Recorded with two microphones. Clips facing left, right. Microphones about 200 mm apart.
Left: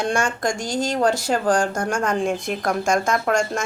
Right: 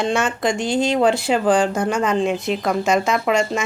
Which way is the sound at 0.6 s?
40° left (ahead or behind).